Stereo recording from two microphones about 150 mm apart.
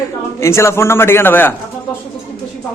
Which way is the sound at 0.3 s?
20° left (ahead or behind).